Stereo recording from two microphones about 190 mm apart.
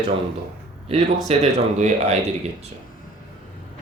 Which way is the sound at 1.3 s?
35° right (ahead or behind).